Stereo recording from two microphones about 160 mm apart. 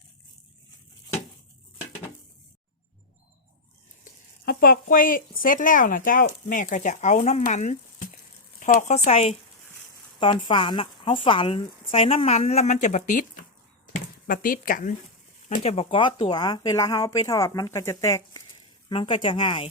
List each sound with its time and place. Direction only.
4.4 s speech: 65° left (ahead or behind); by 9.4 s 45° left (ahead or behind)
10.2 s speech: 30° left (ahead or behind); by 14.9 s 60° left (ahead or behind)
15.6 s speech: 40° left (ahead or behind); by 18.4 s 20° left (ahead or behind)
18.9 s speech: 30° left (ahead or behind)